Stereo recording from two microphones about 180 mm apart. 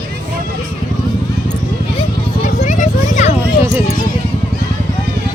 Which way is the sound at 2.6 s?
45° left (ahead or behind).